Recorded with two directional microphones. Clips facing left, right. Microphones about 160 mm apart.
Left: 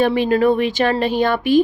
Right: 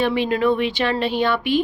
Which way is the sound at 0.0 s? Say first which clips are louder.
Left 4 dB; 45° left (ahead or behind).